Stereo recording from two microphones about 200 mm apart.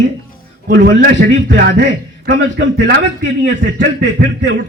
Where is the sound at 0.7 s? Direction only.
50° right (ahead or behind).